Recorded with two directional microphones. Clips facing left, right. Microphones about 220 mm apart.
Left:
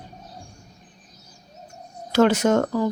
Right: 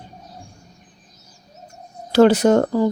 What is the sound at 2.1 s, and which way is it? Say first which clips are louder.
Speech: right 5 dB; 35° right (ahead or behind).